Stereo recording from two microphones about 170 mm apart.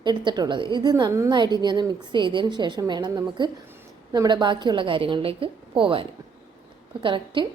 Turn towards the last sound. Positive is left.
turn(degrees=-30)  # may be behind; listen again after turning